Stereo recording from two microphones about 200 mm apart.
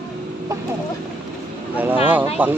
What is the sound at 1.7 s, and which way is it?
Speech, 10° right (ahead or behind).